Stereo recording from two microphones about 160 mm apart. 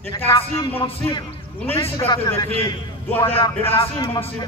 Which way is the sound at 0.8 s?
35° left (ahead or behind).